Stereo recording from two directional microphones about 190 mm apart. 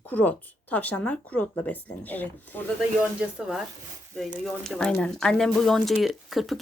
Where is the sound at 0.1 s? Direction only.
10° left (ahead or behind).